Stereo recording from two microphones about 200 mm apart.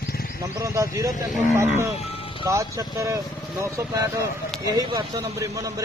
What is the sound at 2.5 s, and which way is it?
Speech, 15° right (ahead or behind).